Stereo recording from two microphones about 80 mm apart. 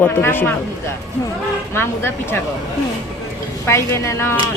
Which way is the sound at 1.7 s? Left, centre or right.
Left.